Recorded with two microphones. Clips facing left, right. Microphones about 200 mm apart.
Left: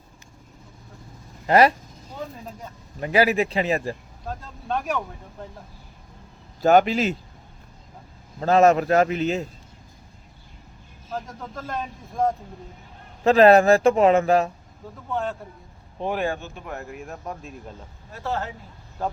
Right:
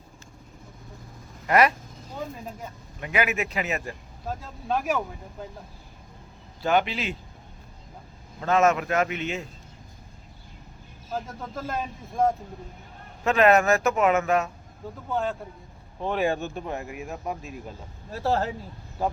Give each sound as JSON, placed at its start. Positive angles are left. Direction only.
{"t": 1.5, "sound": "speech", "side_deg": 30}
{"t": 3.0, "sound": "speech", "side_deg": 35}
{"t": 4.3, "sound": "speech", "side_deg": -5}
{"t": 6.6, "sound": "speech", "side_deg": 45}
{"t": 8.4, "sound": "speech", "side_deg": 35}
{"t": 11.1, "sound": "speech", "side_deg": -5}
{"t": 13.2, "sound": "speech", "side_deg": 35}
{"t": 15.1, "sound": "speech", "side_deg": 0}
{"t": 16.0, "sound": "speech", "side_deg": 20}
{"t": 16.6, "sound": "speech", "side_deg": -15}
{"t": 17.0, "sound": "speech", "side_deg": -5}
{"t": 18.1, "sound": "speech", "side_deg": -35}